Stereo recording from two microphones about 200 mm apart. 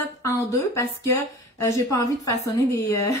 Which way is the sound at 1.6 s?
15° left (ahead or behind).